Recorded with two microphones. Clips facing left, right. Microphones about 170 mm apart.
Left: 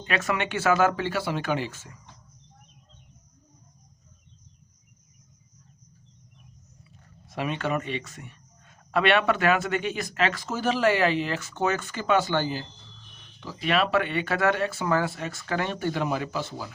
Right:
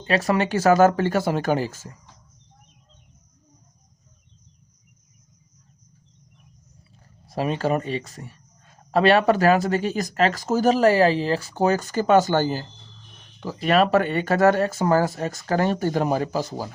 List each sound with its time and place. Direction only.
0.0 s speech: 35° right (ahead or behind)
6.9 s speech: 35° right (ahead or behind)